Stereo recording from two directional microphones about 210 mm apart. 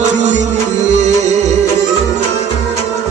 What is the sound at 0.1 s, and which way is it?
Music, 35° right (ahead or behind).